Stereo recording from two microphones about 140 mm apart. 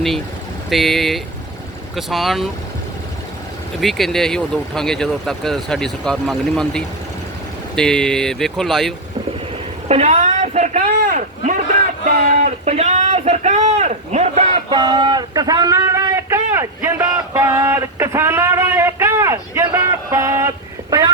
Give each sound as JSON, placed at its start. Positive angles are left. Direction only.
{"t": 0.7, "sound": "speech", "side_deg": 0}
{"t": 3.8, "sound": "speech", "side_deg": 0}
{"t": 9.9, "sound": "speech", "side_deg": -55}
{"t": 11.0, "sound": "speech", "side_deg": -75}
{"t": 12.0, "sound": "speech", "side_deg": -55}
{"t": 14.7, "sound": "speech", "side_deg": -30}
{"t": 19.9, "sound": "a sound", "side_deg": -20}